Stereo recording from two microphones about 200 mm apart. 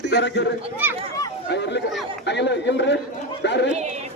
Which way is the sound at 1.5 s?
60° left (ahead or behind).